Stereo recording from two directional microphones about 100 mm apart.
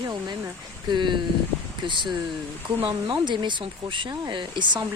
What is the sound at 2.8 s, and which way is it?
Speech, 50° right (ahead or behind).